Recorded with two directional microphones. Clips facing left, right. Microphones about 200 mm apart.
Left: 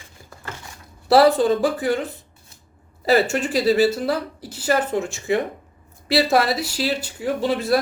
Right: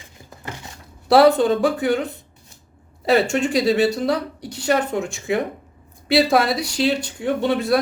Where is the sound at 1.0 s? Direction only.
Centre (ahead or behind).